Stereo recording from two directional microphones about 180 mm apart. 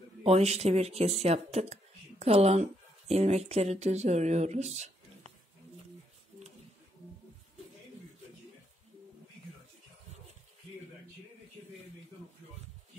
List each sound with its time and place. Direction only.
0.2 s speech: 35° right (ahead or behind)